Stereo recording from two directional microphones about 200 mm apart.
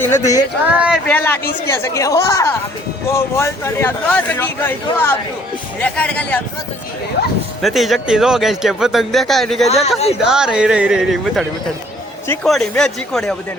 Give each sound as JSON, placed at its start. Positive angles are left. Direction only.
{"t": 0.0, "sound": "speech", "side_deg": 15}
{"t": 0.8, "sound": "speech", "side_deg": -5}
{"t": 1.1, "sound": "speech", "side_deg": 10}
{"t": 7.2, "sound": "speech", "side_deg": 55}
{"t": 7.6, "sound": "speech", "side_deg": 0}
{"t": 9.6, "sound": "speech", "side_deg": 30}
{"t": 10.2, "sound": "speech", "side_deg": -5}